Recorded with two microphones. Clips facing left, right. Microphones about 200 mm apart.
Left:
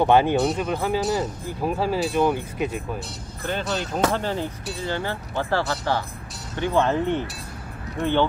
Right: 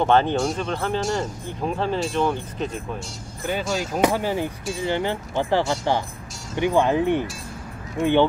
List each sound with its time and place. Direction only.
0.0 s speech: 10° left (ahead or behind)
3.6 s speech: centre (ahead or behind)